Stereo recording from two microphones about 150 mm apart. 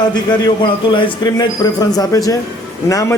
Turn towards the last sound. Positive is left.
turn(degrees=20)  # may be behind; listen again after turning